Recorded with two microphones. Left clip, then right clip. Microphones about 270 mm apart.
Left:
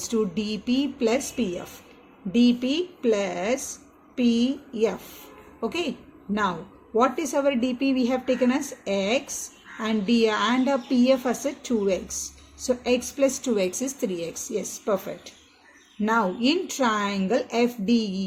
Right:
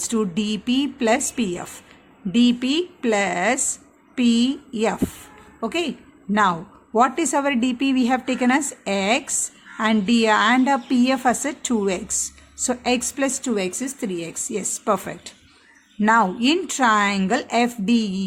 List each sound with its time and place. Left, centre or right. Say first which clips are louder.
0.0 s a woman's voice: right 2 dB; right